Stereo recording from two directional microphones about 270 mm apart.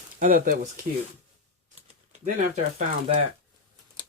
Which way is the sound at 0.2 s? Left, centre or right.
Right.